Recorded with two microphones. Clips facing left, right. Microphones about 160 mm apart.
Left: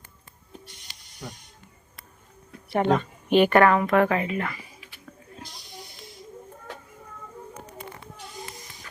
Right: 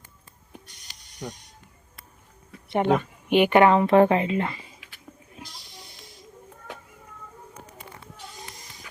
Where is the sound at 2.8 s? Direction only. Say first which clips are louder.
Even; 10° right (ahead or behind); by 4.7 s 25° right (ahead or behind).